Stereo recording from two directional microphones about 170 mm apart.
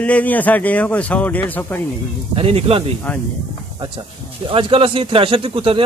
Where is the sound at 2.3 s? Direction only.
35° right (ahead or behind).